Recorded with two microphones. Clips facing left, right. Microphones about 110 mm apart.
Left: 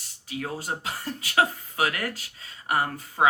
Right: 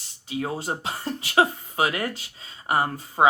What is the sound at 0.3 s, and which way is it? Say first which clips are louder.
Speech: right 4 dB; 25° right (ahead or behind).